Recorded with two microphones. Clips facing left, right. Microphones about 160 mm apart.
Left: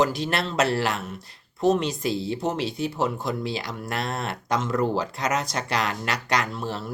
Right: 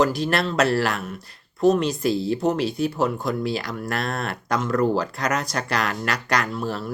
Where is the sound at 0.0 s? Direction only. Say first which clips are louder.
Right 3 dB; 20° left (ahead or behind).